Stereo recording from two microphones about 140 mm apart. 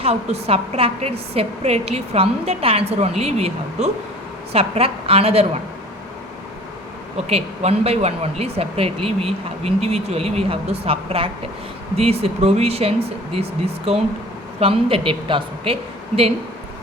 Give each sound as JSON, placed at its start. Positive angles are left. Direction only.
{"t": 0.0, "sound": "speech", "side_deg": -50}
{"t": 7.3, "sound": "a woman's voice", "side_deg": -45}